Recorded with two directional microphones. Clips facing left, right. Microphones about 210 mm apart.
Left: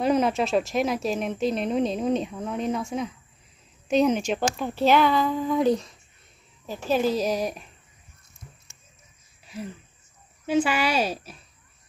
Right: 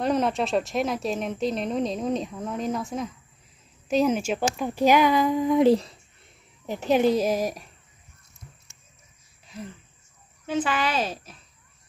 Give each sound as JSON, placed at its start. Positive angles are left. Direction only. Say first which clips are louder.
{"t": 0.0, "sound": "speech", "louder": "left 2 dB", "side_deg": 0}
{"t": 6.6, "sound": "speech", "louder": "right 3 dB", "side_deg": -20}
{"t": 10.4, "sound": "speech", "louder": "left 3 dB", "side_deg": 10}